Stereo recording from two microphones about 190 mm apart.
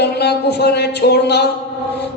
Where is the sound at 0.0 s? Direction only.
60° left (ahead or behind).